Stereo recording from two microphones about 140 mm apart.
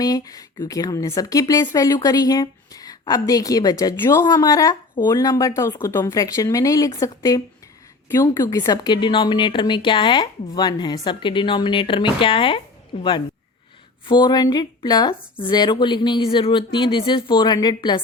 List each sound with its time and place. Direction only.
0.0 s a woman's voice: 25° left (ahead or behind)